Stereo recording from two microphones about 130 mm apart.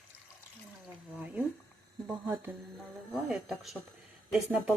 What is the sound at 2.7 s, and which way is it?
Speech, centre (ahead or behind).